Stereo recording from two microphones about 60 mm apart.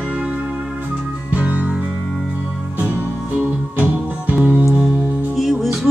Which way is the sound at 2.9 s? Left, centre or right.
Right.